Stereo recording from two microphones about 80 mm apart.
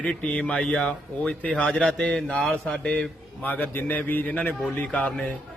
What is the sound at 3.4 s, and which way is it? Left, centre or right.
Speech, left.